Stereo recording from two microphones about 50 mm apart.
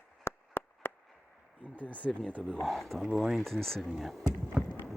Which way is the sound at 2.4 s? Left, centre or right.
Centre.